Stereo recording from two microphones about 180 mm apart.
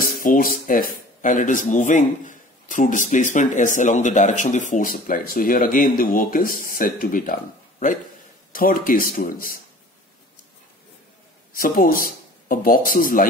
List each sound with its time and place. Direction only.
0.0 s speech: 50° left (ahead or behind)
8.5 s speech: 50° left (ahead or behind)
11.5 s speech: 50° left (ahead or behind)